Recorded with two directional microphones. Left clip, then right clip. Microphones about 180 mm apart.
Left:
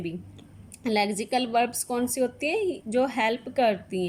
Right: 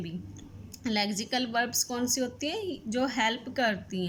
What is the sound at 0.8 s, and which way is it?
A woman's voice, 20° left (ahead or behind).